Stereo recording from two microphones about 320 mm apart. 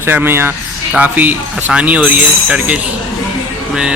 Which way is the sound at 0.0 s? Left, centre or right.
Centre.